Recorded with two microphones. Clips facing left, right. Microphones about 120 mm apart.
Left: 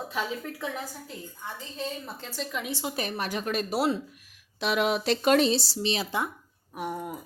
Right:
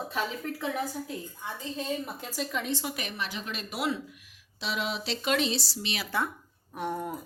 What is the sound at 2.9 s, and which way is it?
Speech, 40° left (ahead or behind).